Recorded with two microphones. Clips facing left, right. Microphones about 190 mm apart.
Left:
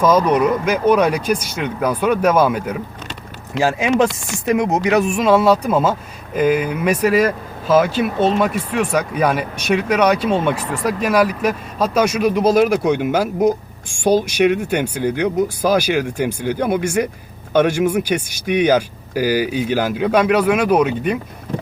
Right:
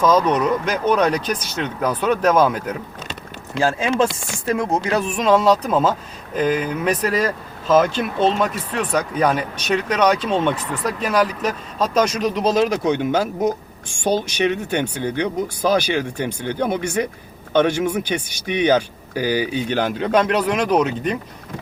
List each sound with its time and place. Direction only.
0.0 s speech: 10° left (ahead or behind)